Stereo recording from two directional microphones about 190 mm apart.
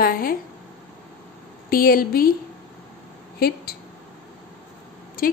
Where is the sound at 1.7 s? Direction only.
50° left (ahead or behind).